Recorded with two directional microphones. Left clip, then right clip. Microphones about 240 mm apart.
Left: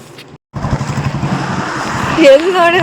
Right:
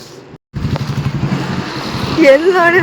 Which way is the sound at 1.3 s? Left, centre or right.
Centre.